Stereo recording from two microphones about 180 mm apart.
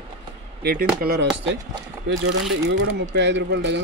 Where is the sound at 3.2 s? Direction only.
80° right.